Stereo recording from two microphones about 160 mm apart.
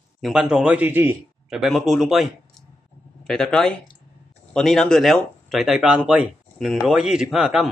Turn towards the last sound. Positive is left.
turn(degrees=-5)  # may be behind; listen again after turning